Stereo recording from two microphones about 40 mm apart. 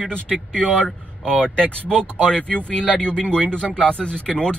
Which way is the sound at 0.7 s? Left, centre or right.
Centre.